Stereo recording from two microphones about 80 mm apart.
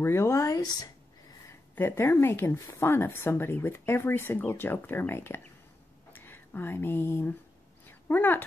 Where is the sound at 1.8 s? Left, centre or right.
Left.